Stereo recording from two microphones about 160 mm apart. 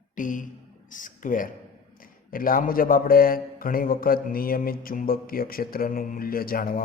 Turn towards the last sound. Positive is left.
turn(degrees=65)  # may be behind; listen again after turning